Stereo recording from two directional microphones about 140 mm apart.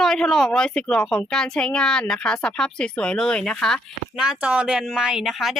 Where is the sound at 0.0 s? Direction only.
5° left (ahead or behind).